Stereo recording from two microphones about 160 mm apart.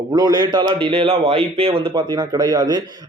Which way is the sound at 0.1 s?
25° right (ahead or behind).